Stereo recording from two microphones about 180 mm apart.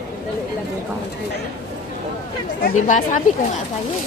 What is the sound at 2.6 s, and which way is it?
Speech, 45° left (ahead or behind).